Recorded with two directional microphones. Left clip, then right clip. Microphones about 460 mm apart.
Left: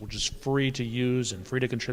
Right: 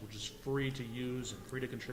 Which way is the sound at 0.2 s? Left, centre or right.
Left.